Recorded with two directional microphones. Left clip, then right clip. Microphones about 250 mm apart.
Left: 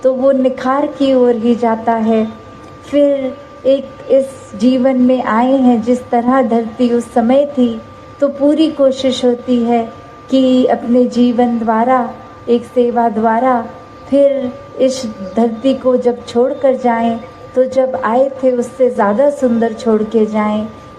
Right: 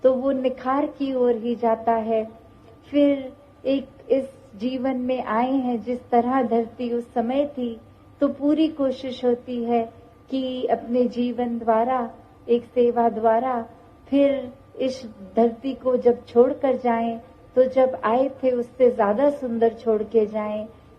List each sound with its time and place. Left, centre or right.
0.0 s a woman's voice: right
15.4 s a woman's voice: right